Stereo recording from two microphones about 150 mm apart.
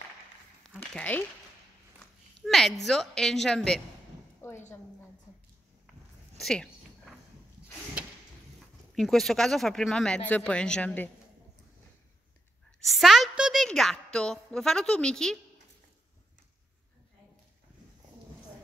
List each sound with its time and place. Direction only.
0.9 s speech: 10° left (ahead or behind)
2.4 s speech: centre (ahead or behind)
4.4 s a woman's voice: 15° left (ahead or behind)
6.4 s a sound: 5° left (ahead or behind)
8.9 s speech: centre (ahead or behind)
12.8 s a woman's voice: centre (ahead or behind)